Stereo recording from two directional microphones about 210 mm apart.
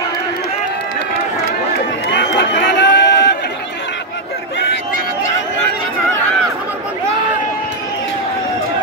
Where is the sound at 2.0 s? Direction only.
55° left (ahead or behind).